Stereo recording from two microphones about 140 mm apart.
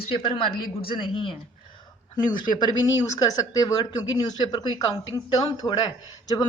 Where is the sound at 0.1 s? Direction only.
40° left (ahead or behind).